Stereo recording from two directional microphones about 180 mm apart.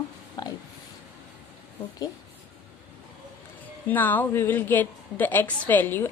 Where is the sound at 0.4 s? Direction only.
25° left (ahead or behind).